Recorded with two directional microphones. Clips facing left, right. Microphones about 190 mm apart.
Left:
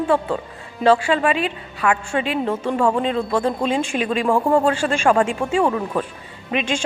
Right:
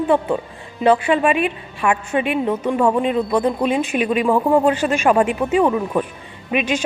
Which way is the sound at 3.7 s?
30° left (ahead or behind).